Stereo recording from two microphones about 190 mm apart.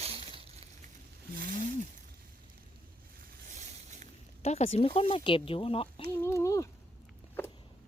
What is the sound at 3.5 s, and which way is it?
Boat, 40° right (ahead or behind).